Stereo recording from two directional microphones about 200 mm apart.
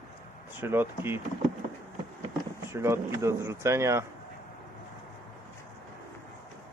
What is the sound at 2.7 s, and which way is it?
Speech, 15° right (ahead or behind).